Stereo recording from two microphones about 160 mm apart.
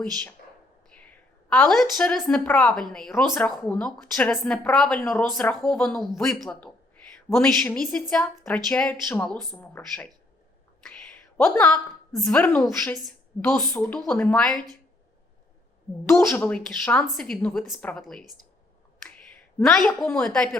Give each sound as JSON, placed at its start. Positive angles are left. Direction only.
{"t": 0.0, "sound": "a woman's voice", "side_deg": 5}
{"t": 3.1, "sound": "speech", "side_deg": 15}
{"t": 3.5, "sound": "speech", "side_deg": 5}
{"t": 11.4, "sound": "speech", "side_deg": 5}
{"t": 14.0, "sound": "speech", "side_deg": 5}
{"t": 16.1, "sound": "speech", "side_deg": 10}
{"t": 19.6, "sound": "speech", "side_deg": 0}